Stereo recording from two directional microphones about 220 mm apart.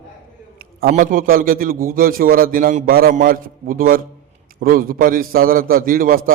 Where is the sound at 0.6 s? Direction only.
40° right (ahead or behind).